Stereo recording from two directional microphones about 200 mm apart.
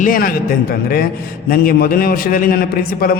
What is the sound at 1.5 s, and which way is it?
A man's voice, 45° left (ahead or behind).